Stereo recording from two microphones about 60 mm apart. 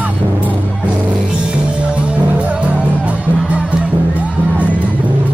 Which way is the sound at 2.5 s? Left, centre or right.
Right.